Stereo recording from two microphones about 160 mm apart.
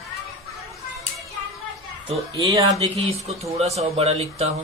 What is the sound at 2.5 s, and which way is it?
Speech, 20° right (ahead or behind).